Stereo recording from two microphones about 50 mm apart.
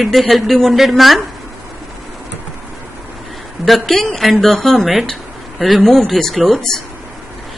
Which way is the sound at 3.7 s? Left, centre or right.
Centre.